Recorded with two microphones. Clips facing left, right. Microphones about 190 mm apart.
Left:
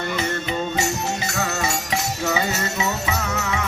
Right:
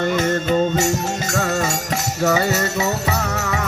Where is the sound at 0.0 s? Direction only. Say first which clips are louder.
Right 6 dB; 50° right (ahead or behind).